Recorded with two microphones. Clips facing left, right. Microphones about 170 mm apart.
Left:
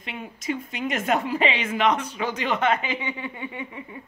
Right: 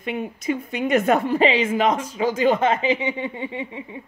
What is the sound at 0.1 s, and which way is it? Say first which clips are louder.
A woman's voice: right 5 dB; 45° right (ahead or behind).